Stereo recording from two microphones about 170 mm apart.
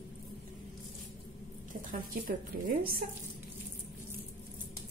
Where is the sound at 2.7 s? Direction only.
60° right (ahead or behind).